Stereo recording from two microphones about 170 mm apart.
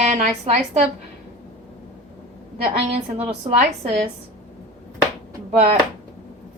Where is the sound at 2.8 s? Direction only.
40° right (ahead or behind).